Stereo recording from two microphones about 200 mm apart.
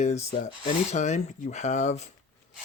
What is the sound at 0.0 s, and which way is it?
Speech, 35° left (ahead or behind).